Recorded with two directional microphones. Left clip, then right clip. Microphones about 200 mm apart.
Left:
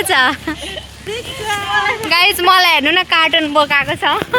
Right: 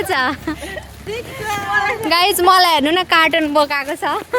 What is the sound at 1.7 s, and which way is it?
Speech, 30° left (ahead or behind).